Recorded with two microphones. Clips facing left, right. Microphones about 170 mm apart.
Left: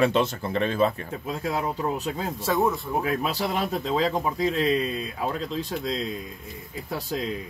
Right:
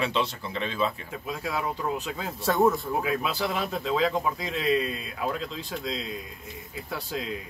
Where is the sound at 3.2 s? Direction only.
40° left (ahead or behind).